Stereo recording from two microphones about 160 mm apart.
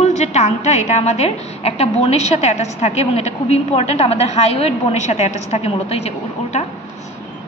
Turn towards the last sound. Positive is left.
turn(degrees=40)  # may be behind; listen again after turning